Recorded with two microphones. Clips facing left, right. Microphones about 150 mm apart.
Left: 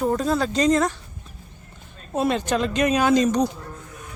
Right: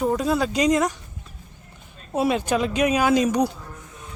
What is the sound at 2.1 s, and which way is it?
Speech, 5° right (ahead or behind).